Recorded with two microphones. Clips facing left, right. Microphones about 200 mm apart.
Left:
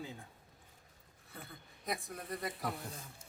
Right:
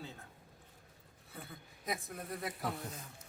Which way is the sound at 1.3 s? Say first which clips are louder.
Right 1 dB; centre (ahead or behind).